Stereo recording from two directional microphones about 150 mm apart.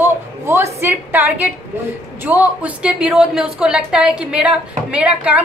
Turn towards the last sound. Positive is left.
turn(degrees=-10)  # may be behind; listen again after turning